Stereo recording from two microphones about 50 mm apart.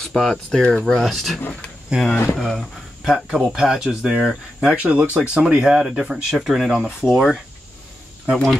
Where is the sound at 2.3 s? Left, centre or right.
Centre.